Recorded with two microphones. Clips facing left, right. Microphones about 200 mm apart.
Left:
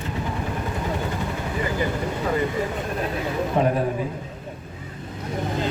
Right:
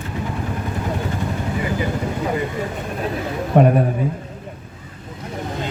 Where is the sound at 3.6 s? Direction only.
55° right (ahead or behind).